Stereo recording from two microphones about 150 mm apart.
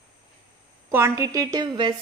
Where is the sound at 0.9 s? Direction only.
20° right (ahead or behind).